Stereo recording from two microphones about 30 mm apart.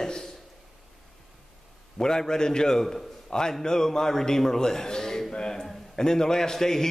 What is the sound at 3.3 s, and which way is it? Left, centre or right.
A man's voice, left.